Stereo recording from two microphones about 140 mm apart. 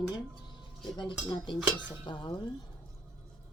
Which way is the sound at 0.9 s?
35° left (ahead or behind).